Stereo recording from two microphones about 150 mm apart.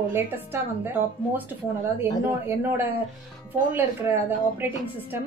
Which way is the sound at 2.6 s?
15° right (ahead or behind).